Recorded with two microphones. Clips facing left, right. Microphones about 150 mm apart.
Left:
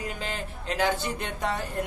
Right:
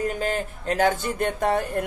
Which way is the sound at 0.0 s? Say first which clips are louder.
Right 8 dB; 45° right (ahead or behind).